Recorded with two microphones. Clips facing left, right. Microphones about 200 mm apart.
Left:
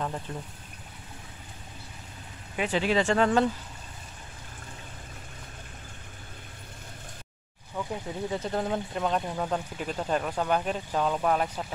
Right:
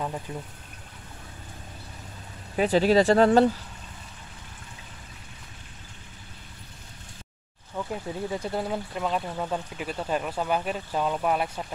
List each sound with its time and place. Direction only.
0.3 s speech: 10° right (ahead or behind)
2.5 s speech: 35° right (ahead or behind)
7.9 s speech: 10° right (ahead or behind)